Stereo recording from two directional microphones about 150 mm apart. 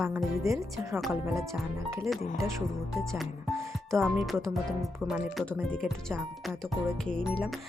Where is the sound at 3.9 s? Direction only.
Centre (ahead or behind).